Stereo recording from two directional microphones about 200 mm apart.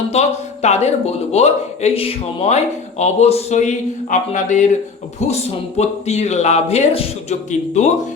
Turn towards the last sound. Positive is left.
turn(degrees=35)  # may be behind; listen again after turning